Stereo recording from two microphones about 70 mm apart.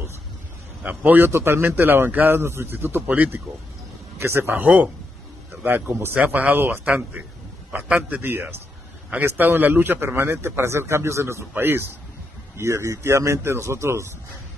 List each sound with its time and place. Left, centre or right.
0.8 s a man's voice: right
4.6 s a man's voice: centre
5.6 s a man's voice: right
7.7 s a man's voice: centre
8.2 s a man's voice: right
11.5 s a man's voice: right
12.5 s a man's voice: right